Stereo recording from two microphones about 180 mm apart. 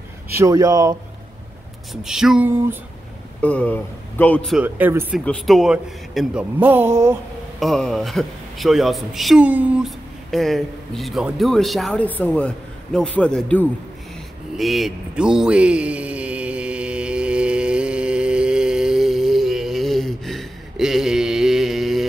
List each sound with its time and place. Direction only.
0.4 s speech: 20° right (ahead or behind)
2.0 s speech: 5° right (ahead or behind)
3.3 s speech: 5° left (ahead or behind)
4.6 s speech: 10° right (ahead or behind)
5.2 s speech: 5° left (ahead or behind); by 7.2 s 15° right (ahead or behind)
7.6 s speech: centre (ahead or behind)
14.6 s a sound: centre (ahead or behind)